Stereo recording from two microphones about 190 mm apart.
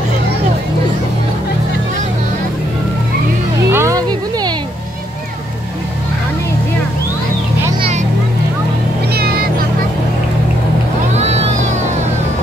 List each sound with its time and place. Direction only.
3.7 s music: 15° right (ahead or behind)
9.1 s vehicle: 55° right (ahead or behind)
11.1 s music: 35° right (ahead or behind)